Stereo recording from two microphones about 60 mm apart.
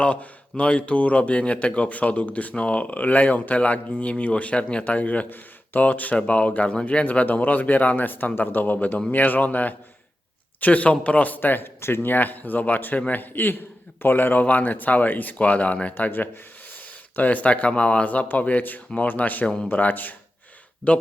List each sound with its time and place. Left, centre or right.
0.0 s speech: left